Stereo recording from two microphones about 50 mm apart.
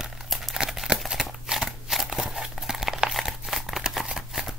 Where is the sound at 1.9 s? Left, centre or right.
Centre.